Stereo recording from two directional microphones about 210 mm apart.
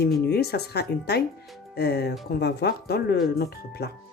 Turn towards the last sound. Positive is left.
turn(degrees=50)  # may be behind; listen again after turning